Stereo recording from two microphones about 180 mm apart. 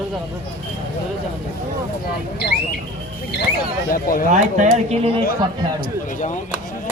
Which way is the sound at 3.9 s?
50° left (ahead or behind).